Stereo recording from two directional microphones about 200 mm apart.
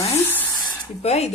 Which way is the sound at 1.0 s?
30° left (ahead or behind).